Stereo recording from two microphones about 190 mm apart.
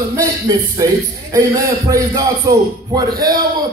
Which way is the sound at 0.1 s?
15° right (ahead or behind).